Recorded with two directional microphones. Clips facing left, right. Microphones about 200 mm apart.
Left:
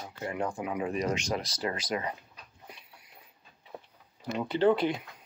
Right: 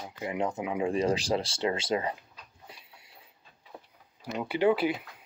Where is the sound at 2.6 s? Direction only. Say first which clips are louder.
Left 2 dB; 25° right (ahead or behind).